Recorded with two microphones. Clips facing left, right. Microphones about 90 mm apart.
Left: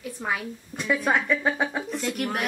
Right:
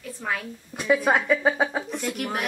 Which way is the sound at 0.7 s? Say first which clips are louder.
Right 3 dB; 5° right (ahead or behind).